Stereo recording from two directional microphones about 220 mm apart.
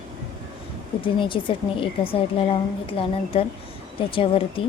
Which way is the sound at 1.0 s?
25° left (ahead or behind).